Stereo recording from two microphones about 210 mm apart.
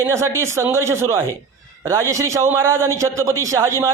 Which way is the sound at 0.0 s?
10° right (ahead or behind).